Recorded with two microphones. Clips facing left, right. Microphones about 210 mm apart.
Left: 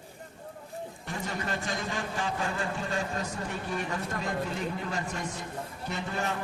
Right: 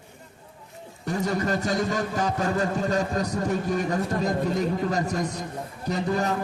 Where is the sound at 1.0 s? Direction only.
40° right (ahead or behind).